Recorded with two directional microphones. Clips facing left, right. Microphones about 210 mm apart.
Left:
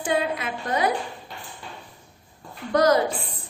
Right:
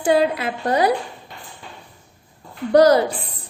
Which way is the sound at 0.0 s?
35° right (ahead or behind).